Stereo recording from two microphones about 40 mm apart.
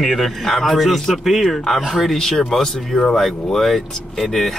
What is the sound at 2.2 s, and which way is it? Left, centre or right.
Speech, centre.